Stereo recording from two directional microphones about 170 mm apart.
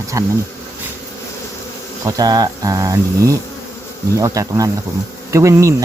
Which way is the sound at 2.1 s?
25° right (ahead or behind).